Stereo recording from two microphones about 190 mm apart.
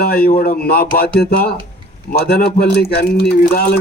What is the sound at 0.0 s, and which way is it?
A man's voice, 55° left (ahead or behind).